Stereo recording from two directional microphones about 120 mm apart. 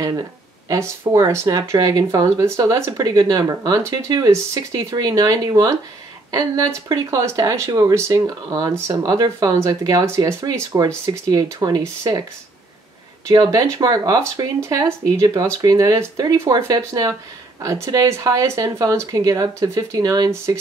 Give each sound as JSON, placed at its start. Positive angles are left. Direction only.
{"t": 0.0, "sound": "speech", "side_deg": -30}
{"t": 13.3, "sound": "speech", "side_deg": -30}